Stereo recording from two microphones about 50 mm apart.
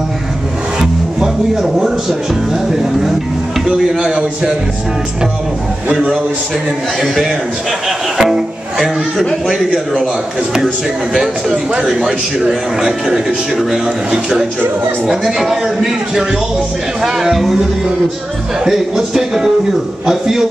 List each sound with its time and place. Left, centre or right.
0.7 s music: centre
1.6 s a man's voice: centre
4.0 s a man's voice: centre
7.0 s a man's voice: centre
8.2 s music: centre
11.5 s a man's voice: right; by 17.6 s centre
18.6 s a man's voice: centre